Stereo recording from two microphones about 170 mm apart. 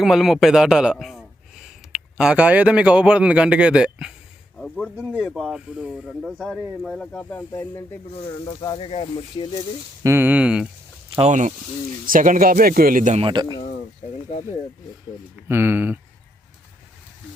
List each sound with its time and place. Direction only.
0.0 s a man's voice: centre (ahead or behind)
4.5 s speech: 5° left (ahead or behind)
8.6 s speech: 30° left (ahead or behind)
10.0 s speech: 15° right (ahead or behind)
11.1 s speech: 40° right (ahead or behind)
13.2 s speech: 25° right (ahead or behind)
15.4 s speech: 15° right (ahead or behind)